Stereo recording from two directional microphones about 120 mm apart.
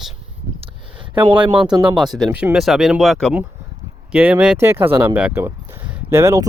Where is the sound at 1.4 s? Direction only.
40° right (ahead or behind).